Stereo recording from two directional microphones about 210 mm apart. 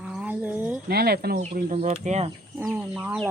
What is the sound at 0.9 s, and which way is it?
Speech, 50° right (ahead or behind).